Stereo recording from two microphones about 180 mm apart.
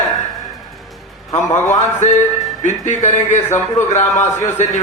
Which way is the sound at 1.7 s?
40° left (ahead or behind).